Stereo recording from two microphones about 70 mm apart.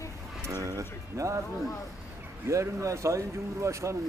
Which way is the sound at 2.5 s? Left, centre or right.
Right.